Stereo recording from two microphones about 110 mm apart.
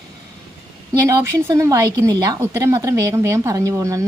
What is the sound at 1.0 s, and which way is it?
A woman's voice, 25° right (ahead or behind).